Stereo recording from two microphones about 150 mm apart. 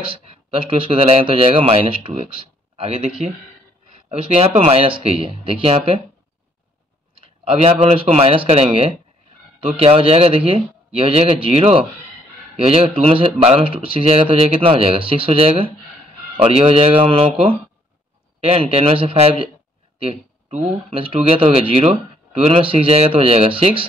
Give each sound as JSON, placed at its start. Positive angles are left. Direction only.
{"t": 0.1, "sound": "speech", "side_deg": -35}
{"t": 7.2, "sound": "speech", "side_deg": -40}
{"t": 20.0, "sound": "a sound", "side_deg": -40}
{"t": 20.9, "sound": "speech", "side_deg": -35}